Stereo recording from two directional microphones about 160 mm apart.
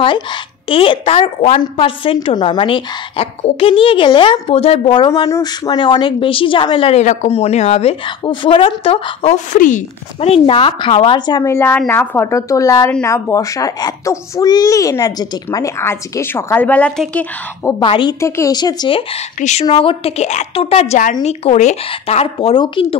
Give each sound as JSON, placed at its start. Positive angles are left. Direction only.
{"t": 0.0, "sound": "a woman's voice", "side_deg": 30}
{"t": 7.0, "sound": "a woman's voice", "side_deg": 50}
{"t": 8.2, "sound": "a woman's voice", "side_deg": 30}
{"t": 11.5, "sound": "a woman's voice", "side_deg": 15}
{"t": 17.6, "sound": "a child's voice", "side_deg": 30}
{"t": 18.2, "sound": "a child's voice", "side_deg": 20}